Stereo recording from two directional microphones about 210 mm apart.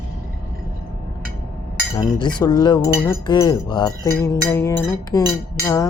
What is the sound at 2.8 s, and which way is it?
Chink, 15° left (ahead or behind).